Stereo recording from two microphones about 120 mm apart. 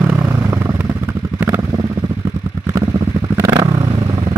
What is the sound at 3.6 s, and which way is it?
Vehicle, 35° right (ahead or behind).